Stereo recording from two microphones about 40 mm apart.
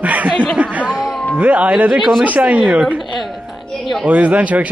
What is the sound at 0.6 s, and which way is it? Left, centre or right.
Speech, right.